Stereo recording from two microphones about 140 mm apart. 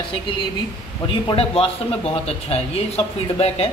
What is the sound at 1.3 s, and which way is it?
A man's voice, 45° left (ahead or behind).